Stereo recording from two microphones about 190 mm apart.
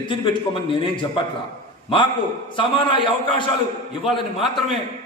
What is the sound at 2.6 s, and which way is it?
Speech, 25° left (ahead or behind).